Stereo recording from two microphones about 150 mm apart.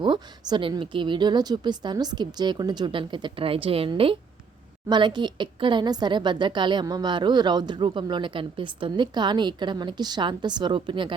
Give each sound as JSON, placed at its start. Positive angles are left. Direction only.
{"t": 0.0, "sound": "a woman's voice", "side_deg": -30}